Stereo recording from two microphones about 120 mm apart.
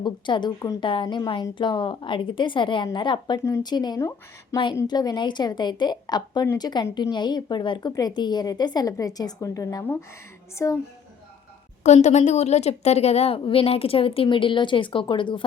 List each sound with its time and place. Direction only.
0.0 s a woman's voice: 40° left (ahead or behind)
12.0 s a woman's voice: 70° left (ahead or behind); by 15.4 s 45° left (ahead or behind)